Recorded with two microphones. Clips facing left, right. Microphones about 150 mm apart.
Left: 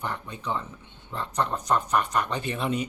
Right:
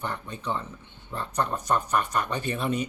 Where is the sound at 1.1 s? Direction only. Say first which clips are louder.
Even; 15° right (ahead or behind).